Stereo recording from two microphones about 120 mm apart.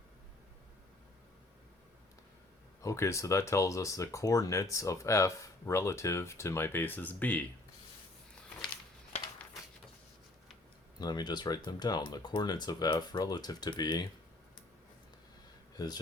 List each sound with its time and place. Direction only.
2.8 s speech: 25° left (ahead or behind)
11.0 s speech: 35° left (ahead or behind)
15.8 s speech: 30° left (ahead or behind)